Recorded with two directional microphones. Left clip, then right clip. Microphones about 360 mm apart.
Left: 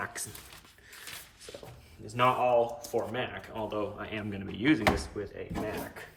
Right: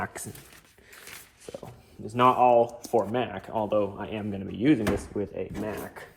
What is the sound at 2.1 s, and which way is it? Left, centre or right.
Speech, centre.